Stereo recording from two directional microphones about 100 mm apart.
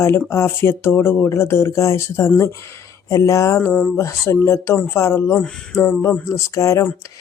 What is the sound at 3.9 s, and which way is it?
Speech, 30° left (ahead or behind).